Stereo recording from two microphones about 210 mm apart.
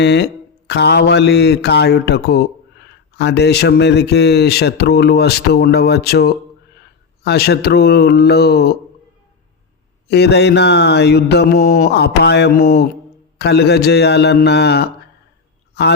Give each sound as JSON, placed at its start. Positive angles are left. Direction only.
{"t": 0.0, "sound": "speech", "side_deg": 55}
{"t": 10.1, "sound": "speech", "side_deg": 50}